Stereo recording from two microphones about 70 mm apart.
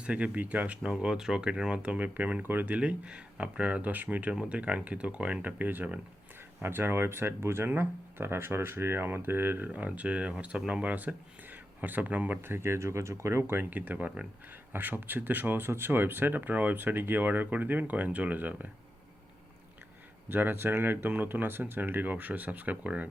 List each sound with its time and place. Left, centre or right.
0.0 s speech: centre
9.6 s speech: centre
12.5 s speech: right
20.2 s speech: right